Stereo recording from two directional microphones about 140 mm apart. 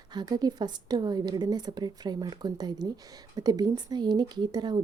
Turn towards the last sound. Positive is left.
turn(degrees=-30)  # may be behind; listen again after turning